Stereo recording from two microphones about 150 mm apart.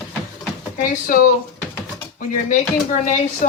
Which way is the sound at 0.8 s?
65° left (ahead or behind).